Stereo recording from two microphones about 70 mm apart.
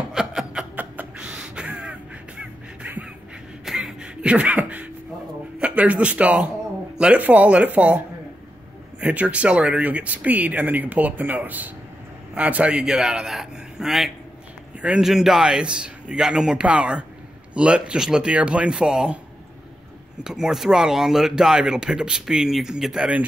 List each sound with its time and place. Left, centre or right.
0.1 s chuckle: centre
1.1 s music: centre
3.6 s a sound: centre
5.6 s speech: centre
9.0 s speech: centre
20.2 s speech: centre